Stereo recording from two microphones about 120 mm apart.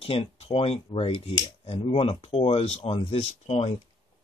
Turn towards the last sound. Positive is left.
turn(degrees=60)  # may be behind; listen again after turning